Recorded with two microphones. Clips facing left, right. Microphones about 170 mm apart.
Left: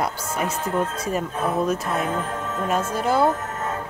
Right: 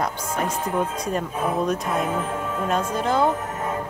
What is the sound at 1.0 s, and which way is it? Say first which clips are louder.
Speech: even; 5° left (ahead or behind).